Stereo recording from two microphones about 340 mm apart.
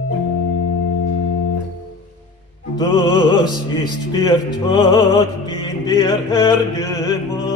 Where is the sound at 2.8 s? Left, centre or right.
Centre.